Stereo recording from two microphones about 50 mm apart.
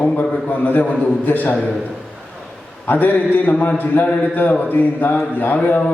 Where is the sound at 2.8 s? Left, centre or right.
Left.